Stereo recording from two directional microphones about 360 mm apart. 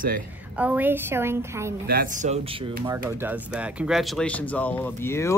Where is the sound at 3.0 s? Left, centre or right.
Centre.